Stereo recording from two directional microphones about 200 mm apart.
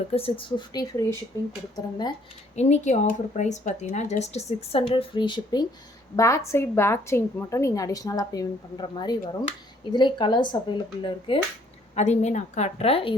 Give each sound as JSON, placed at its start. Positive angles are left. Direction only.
{"t": 0.1, "sound": "speech", "side_deg": 30}
{"t": 2.6, "sound": "a woman's voice", "side_deg": 35}
{"t": 11.9, "sound": "speech", "side_deg": 35}